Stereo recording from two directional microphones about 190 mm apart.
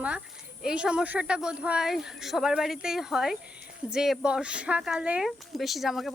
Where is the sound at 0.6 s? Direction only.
5° right (ahead or behind).